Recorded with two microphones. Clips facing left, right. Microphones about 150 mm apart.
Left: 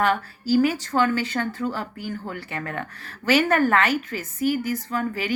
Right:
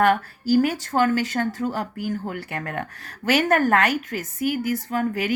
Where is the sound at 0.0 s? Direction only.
50° right (ahead or behind).